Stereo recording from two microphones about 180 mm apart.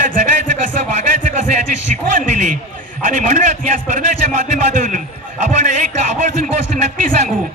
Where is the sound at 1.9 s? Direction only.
45° right (ahead or behind).